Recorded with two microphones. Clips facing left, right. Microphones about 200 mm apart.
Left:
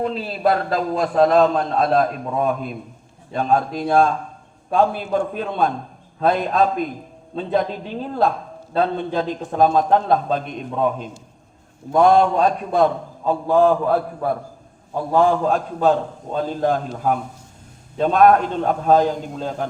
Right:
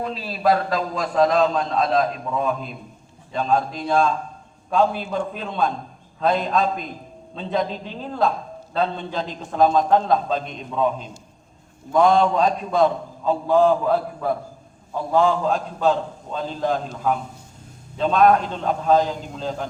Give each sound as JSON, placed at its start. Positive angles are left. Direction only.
{"t": 0.0, "sound": "a man's voice", "side_deg": 55}
{"t": 8.7, "sound": "a man's voice", "side_deg": 50}
{"t": 15.1, "sound": "a man's voice", "side_deg": 50}